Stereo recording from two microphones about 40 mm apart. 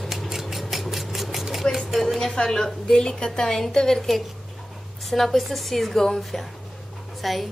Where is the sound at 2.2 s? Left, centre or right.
Centre.